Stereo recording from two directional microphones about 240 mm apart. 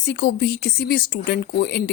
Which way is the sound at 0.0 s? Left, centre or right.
Left.